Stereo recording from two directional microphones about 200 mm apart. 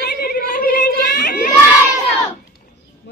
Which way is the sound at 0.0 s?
50° left (ahead or behind).